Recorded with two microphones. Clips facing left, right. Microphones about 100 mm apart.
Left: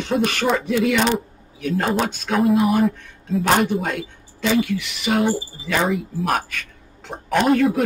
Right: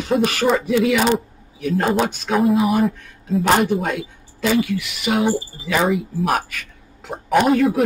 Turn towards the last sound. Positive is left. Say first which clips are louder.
# right 2 dB
turn(degrees=0)  # may be behind; listen again after turning